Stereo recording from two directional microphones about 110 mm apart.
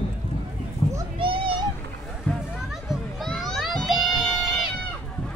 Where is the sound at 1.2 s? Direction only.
50° right (ahead or behind).